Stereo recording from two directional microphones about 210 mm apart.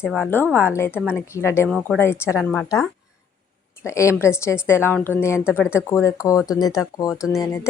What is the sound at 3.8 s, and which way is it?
A woman's voice, 15° left (ahead or behind).